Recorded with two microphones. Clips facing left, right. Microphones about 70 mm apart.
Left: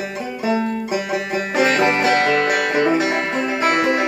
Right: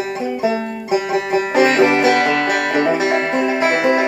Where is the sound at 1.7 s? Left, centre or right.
Right.